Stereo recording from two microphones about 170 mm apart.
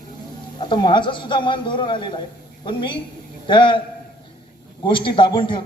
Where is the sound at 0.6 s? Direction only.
25° left (ahead or behind).